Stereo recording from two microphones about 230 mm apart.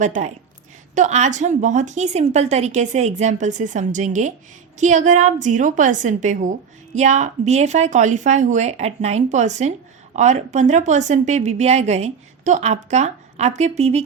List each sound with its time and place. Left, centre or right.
0.0 s a woman's voice: right